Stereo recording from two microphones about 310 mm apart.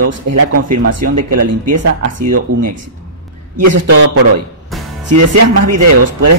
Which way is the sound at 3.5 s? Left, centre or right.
Right.